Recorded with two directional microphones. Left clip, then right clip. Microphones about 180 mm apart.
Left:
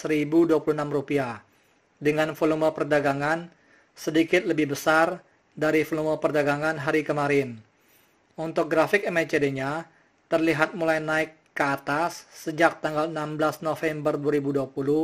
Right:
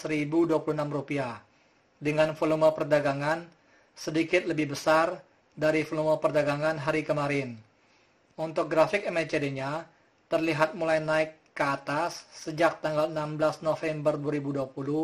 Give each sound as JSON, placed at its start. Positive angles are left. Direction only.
{"t": 0.0, "sound": "speech", "side_deg": 25}